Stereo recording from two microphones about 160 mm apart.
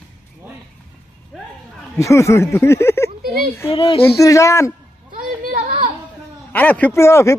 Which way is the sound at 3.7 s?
35° left (ahead or behind).